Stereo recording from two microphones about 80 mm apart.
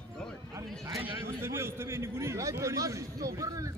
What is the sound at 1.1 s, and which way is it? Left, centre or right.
A man's voice, right.